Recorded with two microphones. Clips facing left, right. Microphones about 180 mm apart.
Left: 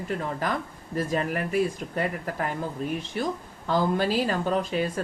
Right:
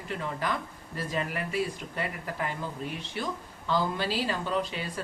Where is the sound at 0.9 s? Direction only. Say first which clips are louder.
Left 6 dB; 45° left (ahead or behind).